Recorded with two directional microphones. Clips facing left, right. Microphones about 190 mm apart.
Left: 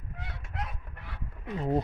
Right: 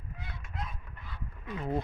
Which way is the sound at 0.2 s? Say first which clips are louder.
Left 3 dB; 75° left (ahead or behind).